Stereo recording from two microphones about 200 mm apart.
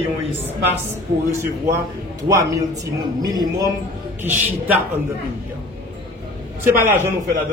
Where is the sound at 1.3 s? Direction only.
10° right (ahead or behind).